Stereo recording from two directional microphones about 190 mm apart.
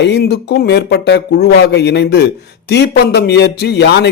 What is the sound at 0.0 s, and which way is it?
A man's voice, 60° left (ahead or behind).